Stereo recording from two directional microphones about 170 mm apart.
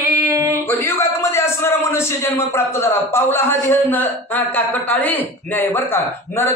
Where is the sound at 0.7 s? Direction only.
15° left (ahead or behind).